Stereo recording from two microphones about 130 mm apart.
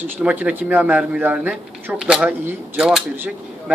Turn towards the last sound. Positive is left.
turn(degrees=-10)  # may be behind; listen again after turning